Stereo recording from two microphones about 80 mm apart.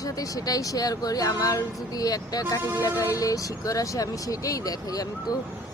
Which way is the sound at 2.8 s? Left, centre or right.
Left.